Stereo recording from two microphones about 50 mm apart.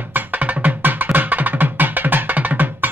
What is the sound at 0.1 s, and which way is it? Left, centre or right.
Music, right.